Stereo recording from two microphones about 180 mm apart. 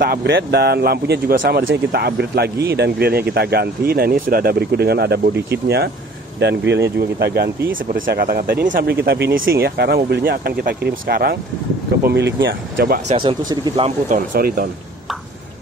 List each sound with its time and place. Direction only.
0.0 s speech: 60° right (ahead or behind)
1.4 s speech: 90° right; by 8.9 s 55° right (ahead or behind)
9.0 s speech: 65° right (ahead or behind)
9.5 s speech: 60° right (ahead or behind)
13.1 s speech: 30° right (ahead or behind)
13.8 s speech: 45° right (ahead or behind)